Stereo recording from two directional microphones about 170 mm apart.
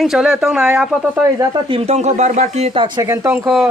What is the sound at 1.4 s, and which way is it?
Speech, 25° right (ahead or behind).